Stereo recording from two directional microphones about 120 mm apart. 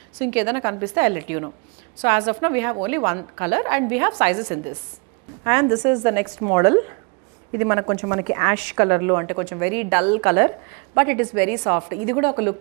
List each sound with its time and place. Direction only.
0.2 s speech: 20° right (ahead or behind)